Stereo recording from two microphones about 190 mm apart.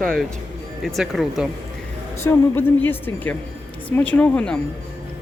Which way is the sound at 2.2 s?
10° left (ahead or behind).